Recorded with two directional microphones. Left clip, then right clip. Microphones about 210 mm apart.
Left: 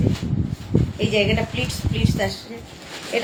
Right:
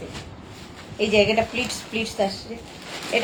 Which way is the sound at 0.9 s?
15° left (ahead or behind).